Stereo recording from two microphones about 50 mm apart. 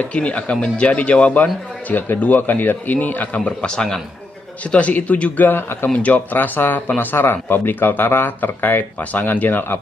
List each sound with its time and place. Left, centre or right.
0.0 s a man's voice: left
3.3 s speech: left
5.5 s speech: left
5.9 s a man's voice: left